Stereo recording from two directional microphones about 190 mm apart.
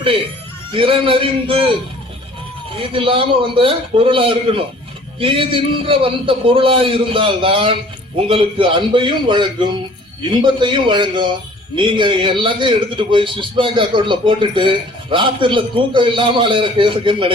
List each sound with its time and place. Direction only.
0.7 s a man's voice: 30° right (ahead or behind)
2.7 s a man's voice: 30° right (ahead or behind)